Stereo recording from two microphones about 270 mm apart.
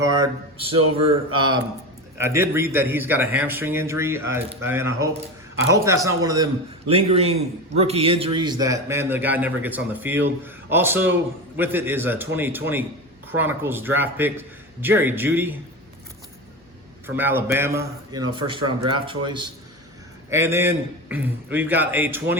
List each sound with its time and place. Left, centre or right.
0.0 s a man's voice: centre
17.2 s a man's voice: centre